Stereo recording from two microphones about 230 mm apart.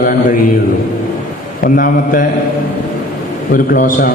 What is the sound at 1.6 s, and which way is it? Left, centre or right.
Speech, left.